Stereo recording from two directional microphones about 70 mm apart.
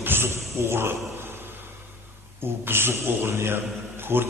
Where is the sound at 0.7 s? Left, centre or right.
Right.